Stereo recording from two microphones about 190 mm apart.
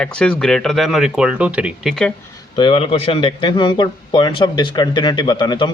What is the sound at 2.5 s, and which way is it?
A man's voice, 25° left (ahead or behind).